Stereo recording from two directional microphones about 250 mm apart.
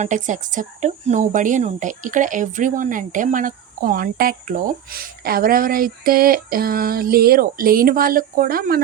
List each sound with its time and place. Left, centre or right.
0.0 s speech: right